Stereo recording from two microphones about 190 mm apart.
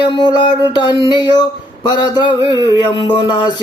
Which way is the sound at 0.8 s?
25° left (ahead or behind).